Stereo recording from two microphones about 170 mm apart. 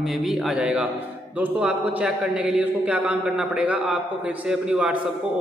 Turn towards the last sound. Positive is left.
turn(degrees=-10)  # may be behind; listen again after turning